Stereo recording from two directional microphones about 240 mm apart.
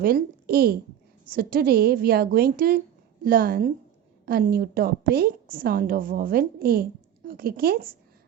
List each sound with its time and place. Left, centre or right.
0.0 s a woman's voice: right